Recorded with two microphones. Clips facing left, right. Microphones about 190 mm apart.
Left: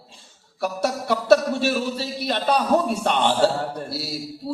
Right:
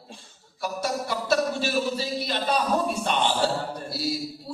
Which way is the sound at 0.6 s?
65° left (ahead or behind).